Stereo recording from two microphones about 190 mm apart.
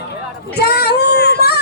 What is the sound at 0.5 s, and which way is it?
Child singing, 55° left (ahead or behind).